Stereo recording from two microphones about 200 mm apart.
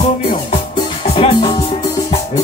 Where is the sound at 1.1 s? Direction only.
30° left (ahead or behind).